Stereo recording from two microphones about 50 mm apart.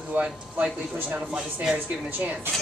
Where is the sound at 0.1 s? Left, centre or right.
Right.